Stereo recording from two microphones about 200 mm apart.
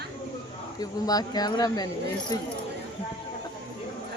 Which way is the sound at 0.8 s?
20° left (ahead or behind).